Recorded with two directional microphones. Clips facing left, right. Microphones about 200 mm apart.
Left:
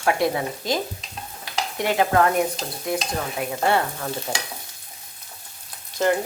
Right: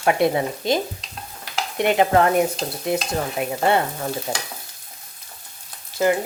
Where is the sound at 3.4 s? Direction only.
20° right (ahead or behind).